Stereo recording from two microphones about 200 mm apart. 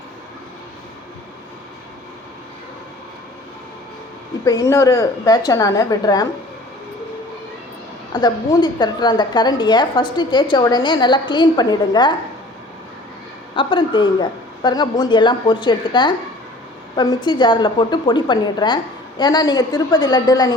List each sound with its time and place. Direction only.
4.4 s a woman's voice: 15° left (ahead or behind)
8.1 s a woman's voice: 20° left (ahead or behind)
13.6 s a woman's voice: 25° left (ahead or behind)